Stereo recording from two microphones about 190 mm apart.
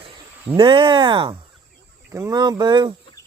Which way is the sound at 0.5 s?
25° right (ahead or behind).